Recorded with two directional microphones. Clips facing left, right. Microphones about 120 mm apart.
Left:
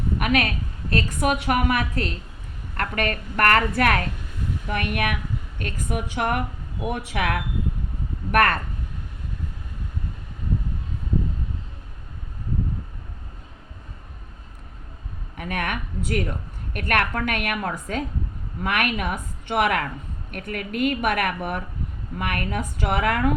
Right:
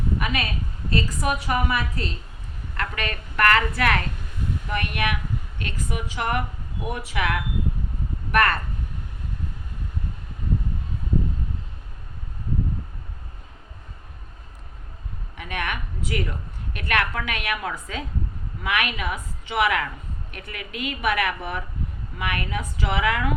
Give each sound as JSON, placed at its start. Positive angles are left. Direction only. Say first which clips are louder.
{"t": 0.2, "sound": "a sound", "louder": "left 5 dB", "side_deg": 60}
{"t": 0.9, "sound": "a woman's voice", "louder": "left 2 dB", "side_deg": 60}
{"t": 2.7, "sound": "a woman's voice", "louder": "left 4 dB", "side_deg": 45}
{"t": 15.4, "sound": "a woman's voice", "louder": "left 2 dB", "side_deg": 50}